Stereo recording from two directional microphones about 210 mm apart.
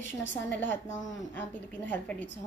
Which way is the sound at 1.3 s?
5° left (ahead or behind).